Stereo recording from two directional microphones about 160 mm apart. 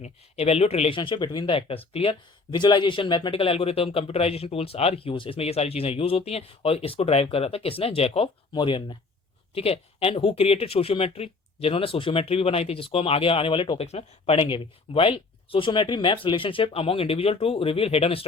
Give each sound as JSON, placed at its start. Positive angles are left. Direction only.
{"t": 0.0, "sound": "speech", "side_deg": 40}